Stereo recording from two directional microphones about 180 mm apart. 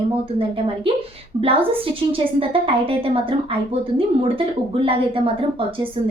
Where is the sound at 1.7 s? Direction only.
30° right (ahead or behind).